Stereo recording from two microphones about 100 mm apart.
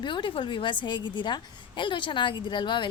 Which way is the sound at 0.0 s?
55° left (ahead or behind).